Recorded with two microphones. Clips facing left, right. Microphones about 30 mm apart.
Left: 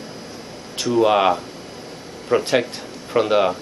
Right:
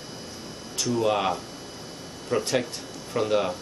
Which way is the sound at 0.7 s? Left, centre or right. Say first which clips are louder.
Left 8 dB; left.